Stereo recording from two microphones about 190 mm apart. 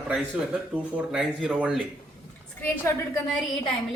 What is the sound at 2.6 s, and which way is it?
Speech, 10° left (ahead or behind).